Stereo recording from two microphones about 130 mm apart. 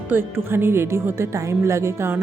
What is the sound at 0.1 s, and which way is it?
Speech, 15° right (ahead or behind).